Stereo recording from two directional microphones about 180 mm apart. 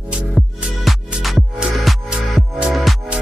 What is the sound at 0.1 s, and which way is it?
Music, 5° right (ahead or behind).